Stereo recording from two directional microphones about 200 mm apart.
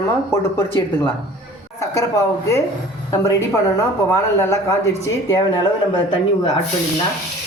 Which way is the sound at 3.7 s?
15° left (ahead or behind).